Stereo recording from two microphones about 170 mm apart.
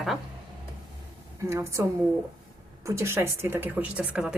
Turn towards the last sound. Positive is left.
turn(degrees=-5)  # may be behind; listen again after turning